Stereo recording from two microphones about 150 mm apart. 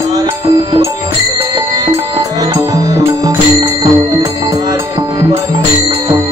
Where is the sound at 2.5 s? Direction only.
25° right (ahead or behind).